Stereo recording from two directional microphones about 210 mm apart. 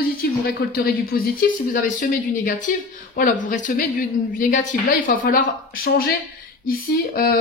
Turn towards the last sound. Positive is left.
turn(degrees=45)  # may be behind; listen again after turning